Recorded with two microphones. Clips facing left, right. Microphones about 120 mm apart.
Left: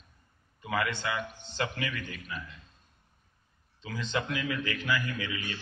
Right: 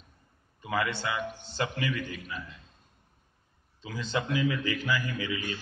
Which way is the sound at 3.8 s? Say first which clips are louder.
Right 1 dB; 10° right (ahead or behind).